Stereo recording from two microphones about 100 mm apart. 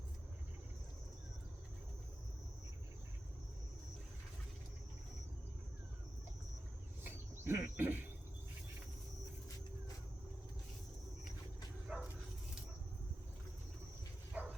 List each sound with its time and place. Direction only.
7.0 s cricket: 20° right (ahead or behind)
11.9 s bow-wow: 10° right (ahead or behind)
14.3 s dog: 15° right (ahead or behind)